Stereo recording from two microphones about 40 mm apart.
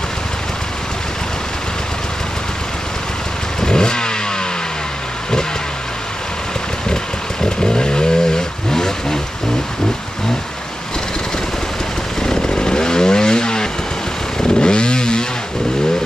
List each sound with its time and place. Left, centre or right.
3.6 s vehicle: centre
7.4 s vehicle: left
12.2 s motorcycle: centre
14.6 s vehicle: left